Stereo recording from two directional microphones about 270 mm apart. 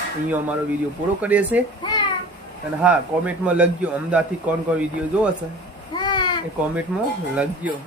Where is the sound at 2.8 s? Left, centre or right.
Centre.